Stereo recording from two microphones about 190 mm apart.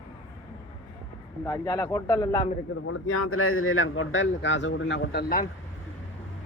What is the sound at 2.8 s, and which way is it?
A man's voice, 90° left.